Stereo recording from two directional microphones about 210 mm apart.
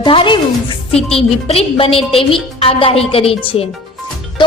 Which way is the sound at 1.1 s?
30° left (ahead or behind).